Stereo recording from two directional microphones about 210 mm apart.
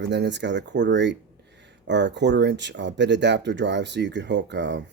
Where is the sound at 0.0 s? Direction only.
55° right (ahead or behind).